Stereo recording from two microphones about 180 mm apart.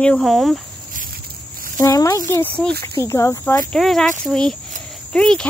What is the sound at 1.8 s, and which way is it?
A child's voice, 20° left (ahead or behind).